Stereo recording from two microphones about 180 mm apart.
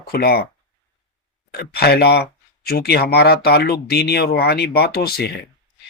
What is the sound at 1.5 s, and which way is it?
Speech, 60° left (ahead or behind).